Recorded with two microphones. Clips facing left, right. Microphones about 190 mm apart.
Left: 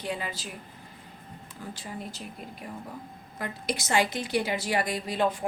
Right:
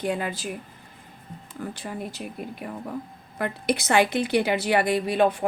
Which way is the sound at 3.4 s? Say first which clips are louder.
Right 7 dB; 60° right (ahead or behind).